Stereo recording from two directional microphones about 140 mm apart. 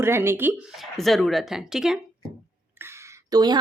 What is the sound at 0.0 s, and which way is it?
Speech, 15° right (ahead or behind).